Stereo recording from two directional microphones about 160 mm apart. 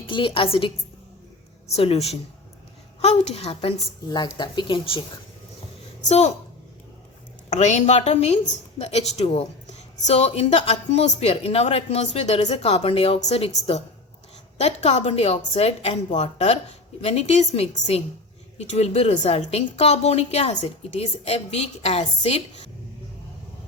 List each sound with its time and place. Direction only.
0.0 s a woman's voice: 30° left (ahead or behind)
6.0 s a woman's voice: 45° left (ahead or behind)
7.5 s a woman's voice: 45° left (ahead or behind)